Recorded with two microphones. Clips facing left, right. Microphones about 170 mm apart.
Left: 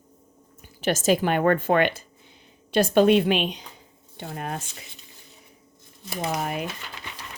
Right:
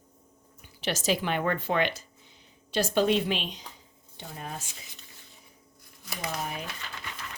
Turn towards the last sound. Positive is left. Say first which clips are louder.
# left 7 dB
turn(degrees=65)  # may be behind; listen again after turning